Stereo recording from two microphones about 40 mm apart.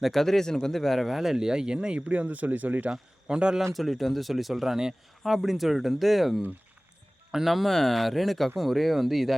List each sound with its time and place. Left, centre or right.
0.0 s speech: centre; by 2.0 s right
2.0 s speech: right
2.9 s speech: right
3.6 s speech: centre